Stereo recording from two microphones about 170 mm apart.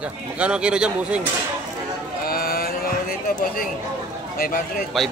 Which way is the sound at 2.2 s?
60° left (ahead or behind).